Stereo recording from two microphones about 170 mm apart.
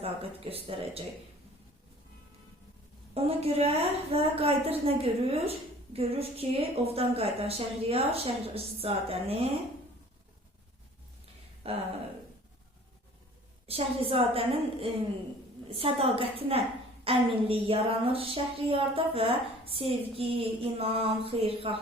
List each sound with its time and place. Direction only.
0.0 s a woman's voice: 35° right (ahead or behind)
3.2 s a woman's voice: 35° right (ahead or behind)
11.6 s a woman's voice: 35° right (ahead or behind)
13.7 s a woman's voice: 35° right (ahead or behind)